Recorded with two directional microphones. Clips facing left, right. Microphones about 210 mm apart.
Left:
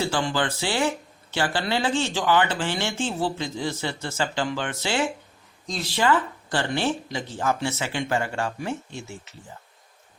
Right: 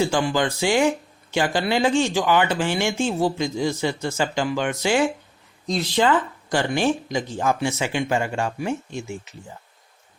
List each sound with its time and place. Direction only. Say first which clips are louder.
0.0 s speech: right 4 dB; 15° right (ahead or behind)